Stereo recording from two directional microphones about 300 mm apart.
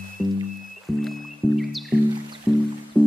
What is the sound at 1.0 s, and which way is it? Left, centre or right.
Music, centre.